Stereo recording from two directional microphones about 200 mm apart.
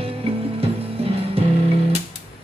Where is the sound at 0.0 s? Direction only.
30° right (ahead or behind).